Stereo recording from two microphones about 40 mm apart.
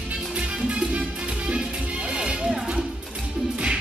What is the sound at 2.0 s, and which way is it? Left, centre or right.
Music, right.